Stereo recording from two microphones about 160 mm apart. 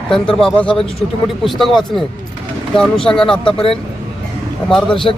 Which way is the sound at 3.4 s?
35° left (ahead or behind).